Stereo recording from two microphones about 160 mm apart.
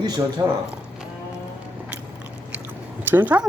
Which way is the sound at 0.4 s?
20° right (ahead or behind).